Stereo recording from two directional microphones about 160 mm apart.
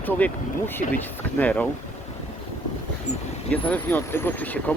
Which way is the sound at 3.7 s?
10° left (ahead or behind).